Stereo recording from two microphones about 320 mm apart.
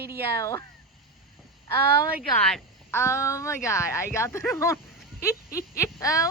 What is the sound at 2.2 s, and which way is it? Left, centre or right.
A woman's voice, centre.